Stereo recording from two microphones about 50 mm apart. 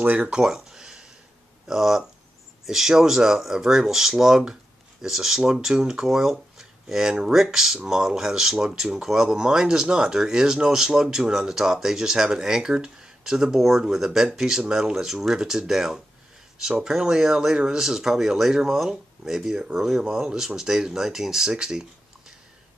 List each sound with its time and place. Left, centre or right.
0.0 s speech: right
0.3 s a sound: centre
1.7 s speech: centre